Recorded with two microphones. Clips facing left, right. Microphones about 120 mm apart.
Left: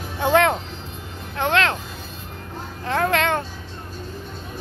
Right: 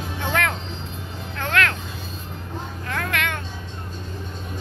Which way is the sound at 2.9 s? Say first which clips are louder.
Left 7 dB; 30° left (ahead or behind).